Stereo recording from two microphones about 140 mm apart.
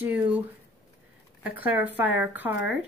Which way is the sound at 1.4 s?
10° right (ahead or behind).